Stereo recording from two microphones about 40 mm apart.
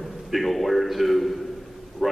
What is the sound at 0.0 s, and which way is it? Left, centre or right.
A man's voice, centre.